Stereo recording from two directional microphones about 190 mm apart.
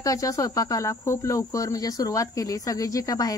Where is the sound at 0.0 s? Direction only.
15° left (ahead or behind).